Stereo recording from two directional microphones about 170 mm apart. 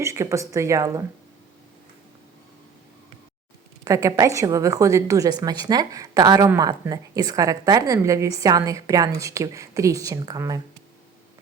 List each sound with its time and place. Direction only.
0.0 s speech: 15° right (ahead or behind)
3.8 s a woman's voice: 20° right (ahead or behind)